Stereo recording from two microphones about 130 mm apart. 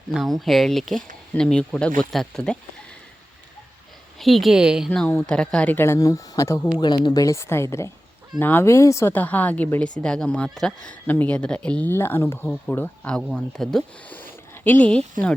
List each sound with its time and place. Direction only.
0.1 s speech: centre (ahead or behind)
4.2 s speech: centre (ahead or behind)
4.9 s speech: 10° left (ahead or behind)
6.7 s speech: 35° left (ahead or behind); by 14.2 s 5° left (ahead or behind)
14.2 s a sound: 15° left (ahead or behind)